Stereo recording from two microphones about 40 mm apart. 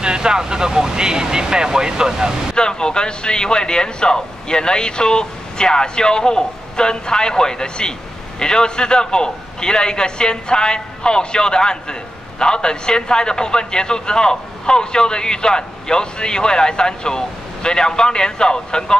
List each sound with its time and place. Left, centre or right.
0.0 s speech: centre
2.5 s a man's voice: centre